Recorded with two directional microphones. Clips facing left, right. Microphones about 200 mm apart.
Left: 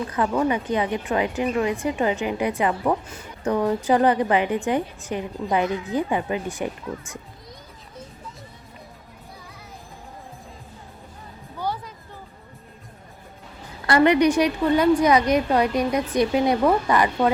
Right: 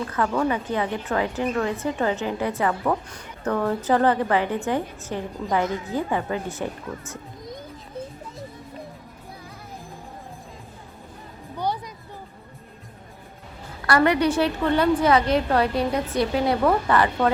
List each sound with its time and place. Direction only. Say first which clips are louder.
0.1 s a woman's voice: left 2 dB; 15° left (ahead or behind)
13.8 s a woman's voice: left 3 dB; 20° left (ahead or behind)